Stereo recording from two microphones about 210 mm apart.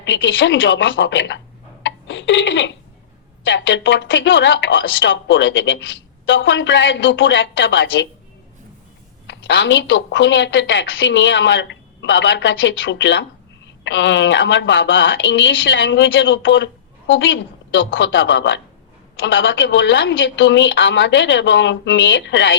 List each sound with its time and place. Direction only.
0.0 s speech: 60° left (ahead or behind)
1.8 s a sound: 60° left (ahead or behind)
3.4 s speech: 60° left (ahead or behind)
9.2 s speech: 60° left (ahead or behind)